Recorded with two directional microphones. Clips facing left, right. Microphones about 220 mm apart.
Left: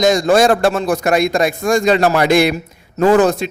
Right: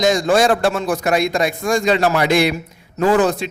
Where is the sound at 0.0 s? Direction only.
40° left (ahead or behind).